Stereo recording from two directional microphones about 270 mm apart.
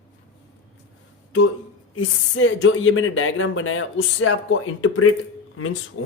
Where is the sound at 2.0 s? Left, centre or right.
Left.